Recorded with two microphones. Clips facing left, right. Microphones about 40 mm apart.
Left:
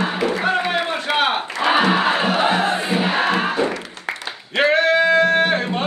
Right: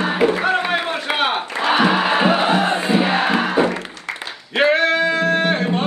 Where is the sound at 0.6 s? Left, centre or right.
Centre.